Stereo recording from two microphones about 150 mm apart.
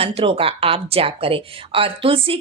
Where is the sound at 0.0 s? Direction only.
40° right (ahead or behind).